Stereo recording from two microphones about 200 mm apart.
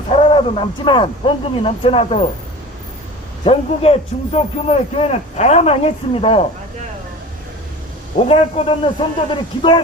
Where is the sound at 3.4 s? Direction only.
30° left (ahead or behind).